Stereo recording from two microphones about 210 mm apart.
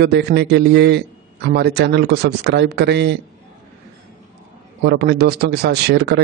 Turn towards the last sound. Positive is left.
turn(degrees=-50)  # may be behind; listen again after turning